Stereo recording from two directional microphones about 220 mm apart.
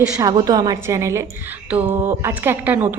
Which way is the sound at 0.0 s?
15° right (ahead or behind).